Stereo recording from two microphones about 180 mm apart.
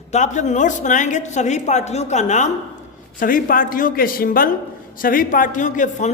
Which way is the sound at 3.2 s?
50° left (ahead or behind).